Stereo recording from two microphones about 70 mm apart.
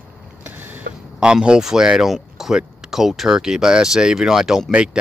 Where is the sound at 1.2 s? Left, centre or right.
Centre.